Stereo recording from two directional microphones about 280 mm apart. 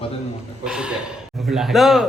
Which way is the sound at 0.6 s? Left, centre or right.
Centre.